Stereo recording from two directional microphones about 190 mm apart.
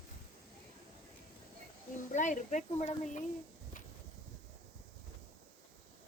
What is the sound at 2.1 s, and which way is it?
Speech, 40° left (ahead or behind).